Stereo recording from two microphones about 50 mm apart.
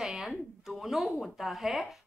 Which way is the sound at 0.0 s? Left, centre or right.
Centre.